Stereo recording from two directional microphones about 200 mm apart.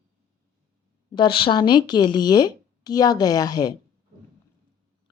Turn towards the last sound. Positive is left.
turn(degrees=20)  # may be behind; listen again after turning